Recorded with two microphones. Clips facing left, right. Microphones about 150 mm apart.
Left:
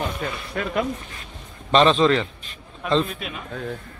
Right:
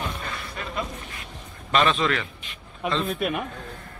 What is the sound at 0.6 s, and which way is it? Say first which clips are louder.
Speech: left 11 dB; 70° left (ahead or behind).